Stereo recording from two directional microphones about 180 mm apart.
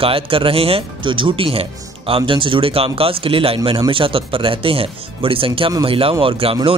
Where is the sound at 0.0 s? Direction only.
30° right (ahead or behind).